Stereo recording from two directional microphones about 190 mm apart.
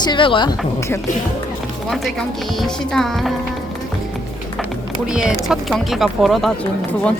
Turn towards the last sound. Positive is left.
turn(degrees=5)  # may be behind; listen again after turning